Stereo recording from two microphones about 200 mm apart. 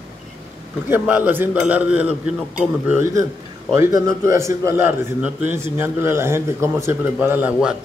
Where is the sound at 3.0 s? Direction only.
15° right (ahead or behind).